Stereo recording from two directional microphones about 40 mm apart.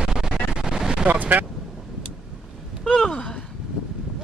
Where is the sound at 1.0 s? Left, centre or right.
Right.